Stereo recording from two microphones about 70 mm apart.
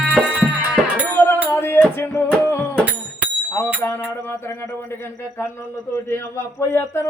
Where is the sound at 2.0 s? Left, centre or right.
Left.